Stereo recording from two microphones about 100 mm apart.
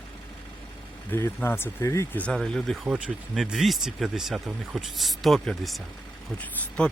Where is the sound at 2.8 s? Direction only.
10° right (ahead or behind).